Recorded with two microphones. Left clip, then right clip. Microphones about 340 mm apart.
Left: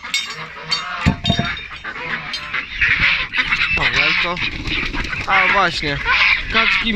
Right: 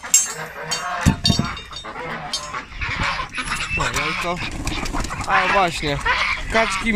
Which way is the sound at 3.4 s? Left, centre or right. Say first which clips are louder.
Left 7 dB; centre.